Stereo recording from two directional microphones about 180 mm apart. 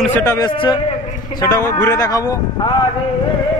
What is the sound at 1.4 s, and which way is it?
Speech, 15° left (ahead or behind).